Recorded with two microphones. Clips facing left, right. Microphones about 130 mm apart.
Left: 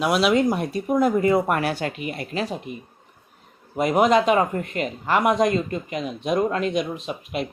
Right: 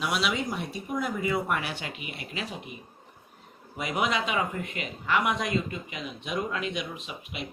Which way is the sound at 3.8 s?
45° left (ahead or behind).